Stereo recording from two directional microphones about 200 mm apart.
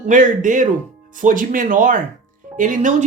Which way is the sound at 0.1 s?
40° right (ahead or behind).